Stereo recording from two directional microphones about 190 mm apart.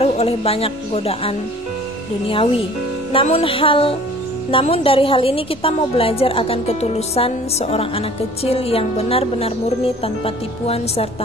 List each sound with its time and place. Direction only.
0.0 s a woman's voice: 30° left (ahead or behind)